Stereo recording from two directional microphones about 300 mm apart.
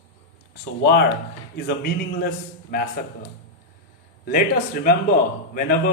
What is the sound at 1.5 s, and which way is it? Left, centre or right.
Speech, left.